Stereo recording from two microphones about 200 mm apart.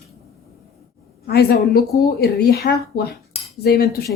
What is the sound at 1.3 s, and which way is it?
A woman's voice, 55° left (ahead or behind).